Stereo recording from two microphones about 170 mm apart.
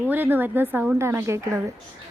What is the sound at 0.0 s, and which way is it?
A woman's voice, 10° right (ahead or behind).